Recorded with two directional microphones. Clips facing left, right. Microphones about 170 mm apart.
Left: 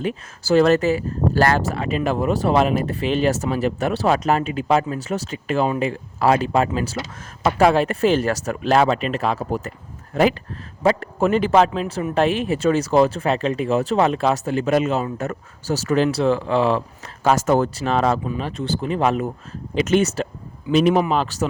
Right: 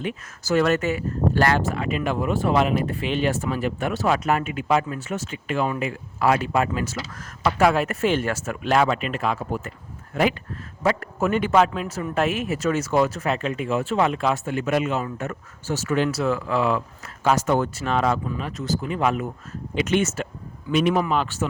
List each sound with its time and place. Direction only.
0.0 s speech: 35° left (ahead or behind)
17.2 s speech: 45° left (ahead or behind)